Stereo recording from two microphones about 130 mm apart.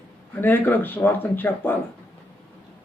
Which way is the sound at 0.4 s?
15° left (ahead or behind).